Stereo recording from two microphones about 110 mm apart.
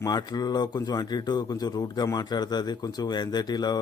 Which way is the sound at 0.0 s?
35° left (ahead or behind).